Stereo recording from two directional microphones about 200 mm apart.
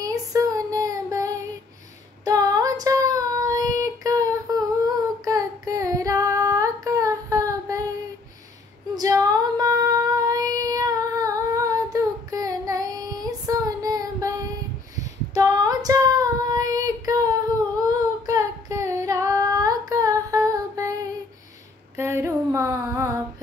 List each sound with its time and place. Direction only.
0.0 s child singing: 15° right (ahead or behind)
8.9 s female singing: 15° right (ahead or behind)
15.3 s child singing: 20° right (ahead or behind)
17.8 s singing: 15° right (ahead or behind)
21.9 s a sound: 15° right (ahead or behind)